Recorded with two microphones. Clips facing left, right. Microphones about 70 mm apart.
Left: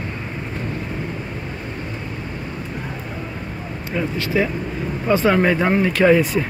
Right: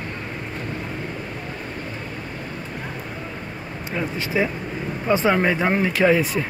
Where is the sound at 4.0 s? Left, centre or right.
Centre.